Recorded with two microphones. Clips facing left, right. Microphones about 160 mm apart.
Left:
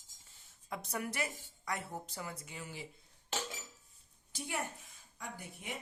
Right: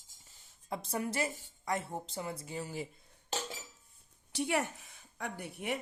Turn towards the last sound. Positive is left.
turn(degrees=-65)  # may be behind; listen again after turning